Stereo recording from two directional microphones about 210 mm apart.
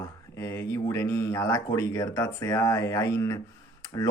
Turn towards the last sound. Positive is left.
turn(degrees=15)  # may be behind; listen again after turning